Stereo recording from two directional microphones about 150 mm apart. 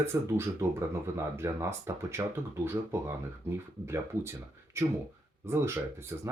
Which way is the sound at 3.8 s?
15° right (ahead or behind).